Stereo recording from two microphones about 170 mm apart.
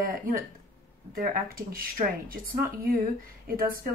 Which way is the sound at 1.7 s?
55° right (ahead or behind).